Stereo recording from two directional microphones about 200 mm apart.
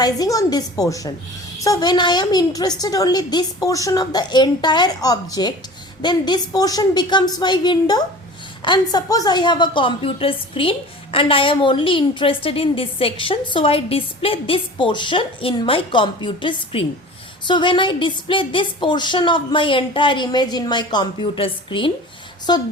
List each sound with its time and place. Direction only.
0.0 s a woman's voice: 20° left (ahead or behind)